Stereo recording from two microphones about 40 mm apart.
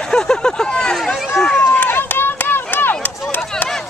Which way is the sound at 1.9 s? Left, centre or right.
Left.